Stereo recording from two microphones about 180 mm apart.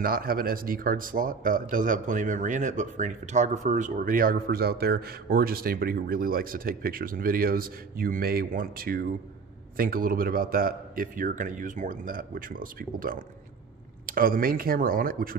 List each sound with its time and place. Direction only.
0.0 s speech: 55° right (ahead or behind)